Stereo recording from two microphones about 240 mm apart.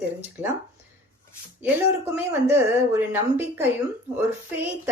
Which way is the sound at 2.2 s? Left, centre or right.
Centre.